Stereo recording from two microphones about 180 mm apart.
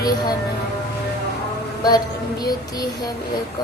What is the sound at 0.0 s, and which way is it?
Child singing, 20° left (ahead or behind).